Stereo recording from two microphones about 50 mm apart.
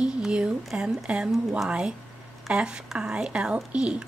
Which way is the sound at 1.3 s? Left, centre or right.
Centre.